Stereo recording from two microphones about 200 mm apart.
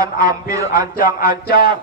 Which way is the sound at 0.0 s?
20° right (ahead or behind).